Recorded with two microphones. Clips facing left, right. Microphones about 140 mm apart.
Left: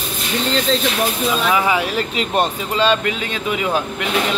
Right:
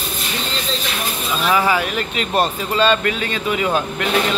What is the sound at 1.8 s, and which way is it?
Speech, 30° left (ahead or behind).